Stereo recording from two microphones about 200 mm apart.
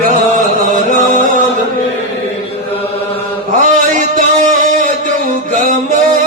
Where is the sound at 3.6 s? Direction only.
40° right (ahead or behind).